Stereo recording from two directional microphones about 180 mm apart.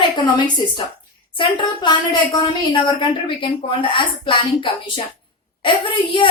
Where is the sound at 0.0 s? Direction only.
25° left (ahead or behind).